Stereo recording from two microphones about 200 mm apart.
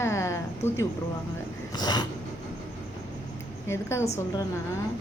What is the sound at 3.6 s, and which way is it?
Speech, 15° left (ahead or behind).